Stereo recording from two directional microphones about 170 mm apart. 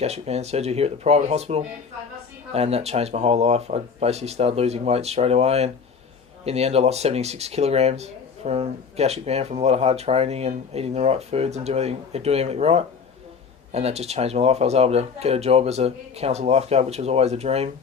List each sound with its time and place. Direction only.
0.0 s speech: 40° right (ahead or behind)